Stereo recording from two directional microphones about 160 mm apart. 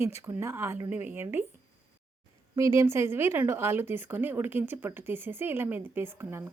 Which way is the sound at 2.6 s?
20° right (ahead or behind).